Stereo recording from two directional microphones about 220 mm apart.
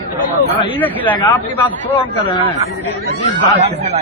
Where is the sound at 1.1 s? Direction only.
20° left (ahead or behind).